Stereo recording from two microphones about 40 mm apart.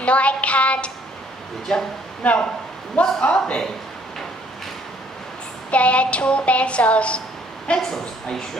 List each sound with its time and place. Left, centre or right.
0.0 s music: left
1.7 s speech: centre
2.2 s speech: left
5.7 s a woman's voice: left